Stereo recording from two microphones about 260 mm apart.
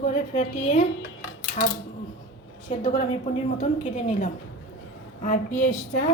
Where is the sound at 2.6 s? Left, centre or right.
Left.